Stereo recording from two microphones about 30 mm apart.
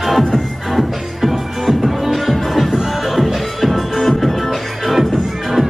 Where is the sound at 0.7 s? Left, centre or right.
Centre.